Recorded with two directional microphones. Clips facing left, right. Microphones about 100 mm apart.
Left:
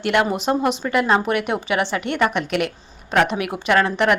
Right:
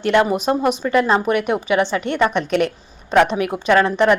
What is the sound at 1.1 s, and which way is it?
Speech, 25° right (ahead or behind).